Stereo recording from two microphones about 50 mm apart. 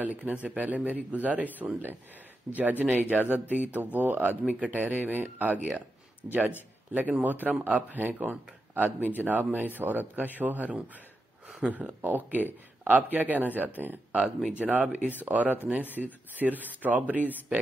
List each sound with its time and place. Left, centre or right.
0.0 s speech: right
2.5 s speech: right
6.9 s speech: right
12.0 s speech: right